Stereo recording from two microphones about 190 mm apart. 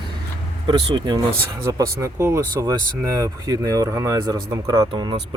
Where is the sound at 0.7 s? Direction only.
25° right (ahead or behind).